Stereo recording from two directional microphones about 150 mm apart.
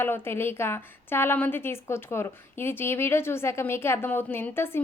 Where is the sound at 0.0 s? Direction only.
15° left (ahead or behind).